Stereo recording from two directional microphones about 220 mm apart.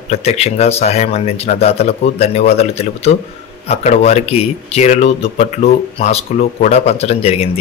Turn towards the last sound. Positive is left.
turn(degrees=25)  # may be behind; listen again after turning